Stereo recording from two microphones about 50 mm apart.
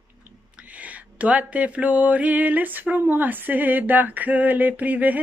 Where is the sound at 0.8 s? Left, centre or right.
Right.